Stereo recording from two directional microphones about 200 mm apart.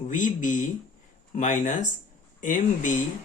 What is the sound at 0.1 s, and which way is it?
Speech, 40° left (ahead or behind).